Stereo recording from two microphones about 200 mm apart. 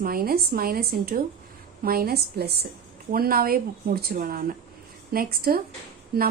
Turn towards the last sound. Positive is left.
turn(degrees=-50)  # may be behind; listen again after turning